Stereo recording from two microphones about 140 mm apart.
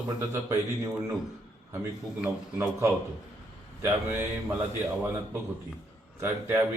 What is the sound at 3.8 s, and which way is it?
Mantra, 15° right (ahead or behind).